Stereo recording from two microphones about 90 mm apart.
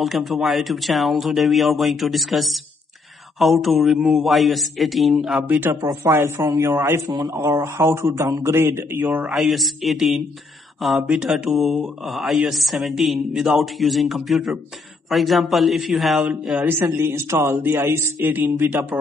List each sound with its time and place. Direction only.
0.0 s speech: centre (ahead or behind)
5.5 s speech: 20° right (ahead or behind)
5.9 s a man's voice: 35° right (ahead or behind)
9.3 s speech: centre (ahead or behind)
16.3 s a man's voice: 10° right (ahead or behind)
17.0 s a man's voice: 30° right (ahead or behind)